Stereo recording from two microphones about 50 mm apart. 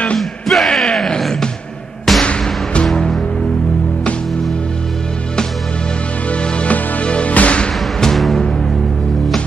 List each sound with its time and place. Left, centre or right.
0.2 s yell: centre
0.9 s music: centre
6.3 s music: left
8.0 s music: centre